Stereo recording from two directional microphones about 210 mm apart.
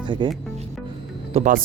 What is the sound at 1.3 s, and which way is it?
Speech, 40° right (ahead or behind).